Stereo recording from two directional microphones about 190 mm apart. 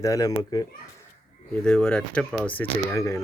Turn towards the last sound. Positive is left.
turn(degrees=15)  # may be behind; listen again after turning